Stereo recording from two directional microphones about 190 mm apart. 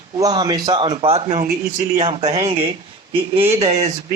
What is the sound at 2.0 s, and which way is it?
Speech, 30° right (ahead or behind).